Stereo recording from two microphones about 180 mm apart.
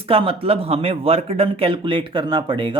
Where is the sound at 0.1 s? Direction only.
30° right (ahead or behind).